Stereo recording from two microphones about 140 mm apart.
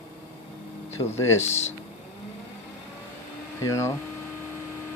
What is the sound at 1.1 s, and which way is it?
Speech, 20° left (ahead or behind).